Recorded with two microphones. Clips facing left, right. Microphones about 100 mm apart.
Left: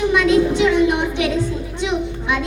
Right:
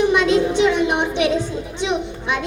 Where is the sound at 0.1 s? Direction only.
20° right (ahead or behind).